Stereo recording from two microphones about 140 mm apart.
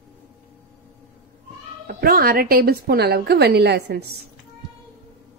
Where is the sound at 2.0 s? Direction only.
90° right.